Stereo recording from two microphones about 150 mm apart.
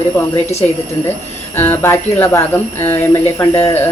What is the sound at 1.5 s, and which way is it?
Speech, 15° left (ahead or behind).